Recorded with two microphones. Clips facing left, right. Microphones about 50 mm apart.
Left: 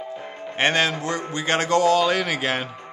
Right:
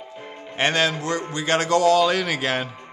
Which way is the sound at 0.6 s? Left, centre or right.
Left.